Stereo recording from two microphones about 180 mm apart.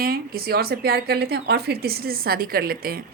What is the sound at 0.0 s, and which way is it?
A woman's voice, 55° right (ahead or behind).